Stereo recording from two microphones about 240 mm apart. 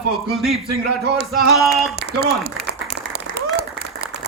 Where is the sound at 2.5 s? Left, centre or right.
Right.